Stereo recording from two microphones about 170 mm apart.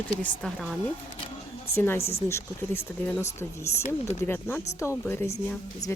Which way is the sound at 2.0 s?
35° left (ahead or behind).